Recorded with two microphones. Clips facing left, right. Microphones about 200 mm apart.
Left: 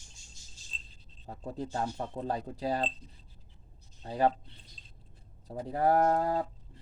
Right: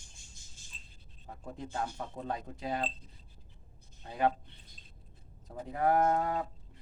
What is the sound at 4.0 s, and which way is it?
Speech, 35° left (ahead or behind).